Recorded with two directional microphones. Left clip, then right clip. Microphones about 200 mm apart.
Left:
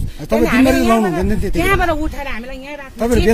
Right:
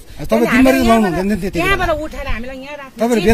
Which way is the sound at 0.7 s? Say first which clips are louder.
Right 2 dB; 35° right (ahead or behind).